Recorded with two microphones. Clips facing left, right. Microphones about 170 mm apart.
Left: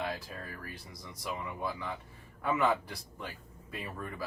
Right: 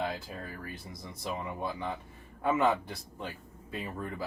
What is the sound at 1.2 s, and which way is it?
A man's voice, 25° right (ahead or behind).